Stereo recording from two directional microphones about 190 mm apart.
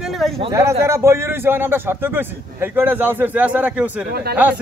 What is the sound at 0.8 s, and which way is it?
A man's voice, 15° right (ahead or behind).